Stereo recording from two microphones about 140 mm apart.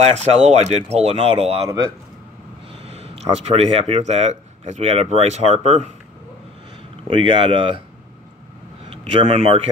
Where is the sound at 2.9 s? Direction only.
50° right (ahead or behind).